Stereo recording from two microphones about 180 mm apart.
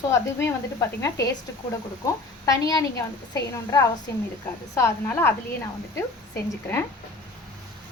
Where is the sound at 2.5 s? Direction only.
20° left (ahead or behind).